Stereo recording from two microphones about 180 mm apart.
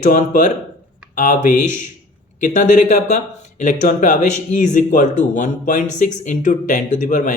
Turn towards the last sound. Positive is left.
turn(degrees=45)  # may be behind; listen again after turning